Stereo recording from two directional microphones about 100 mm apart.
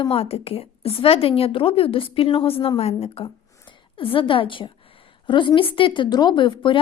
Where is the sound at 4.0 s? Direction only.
60° left (ahead or behind).